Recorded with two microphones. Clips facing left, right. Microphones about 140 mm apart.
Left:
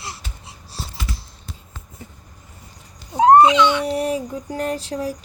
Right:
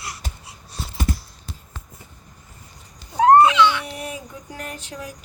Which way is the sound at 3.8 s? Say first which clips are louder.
Left 11 dB; 35° left (ahead or behind).